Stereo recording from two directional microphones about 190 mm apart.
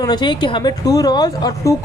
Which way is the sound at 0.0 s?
25° left (ahead or behind).